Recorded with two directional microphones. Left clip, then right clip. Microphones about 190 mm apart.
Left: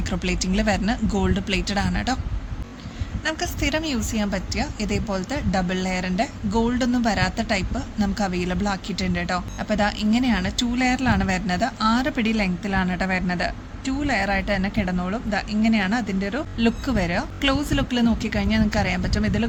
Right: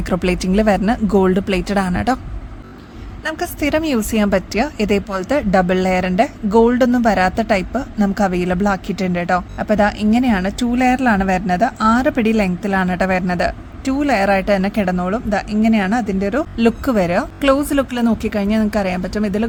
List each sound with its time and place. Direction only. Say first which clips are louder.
0.0 s speech: right 8 dB; 50° right (ahead or behind)
3.2 s a woman's voice: right 5 dB; 50° right (ahead or behind)